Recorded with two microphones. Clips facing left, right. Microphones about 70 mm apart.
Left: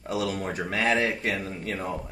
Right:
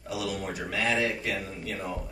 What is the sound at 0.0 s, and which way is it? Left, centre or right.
Speech, left.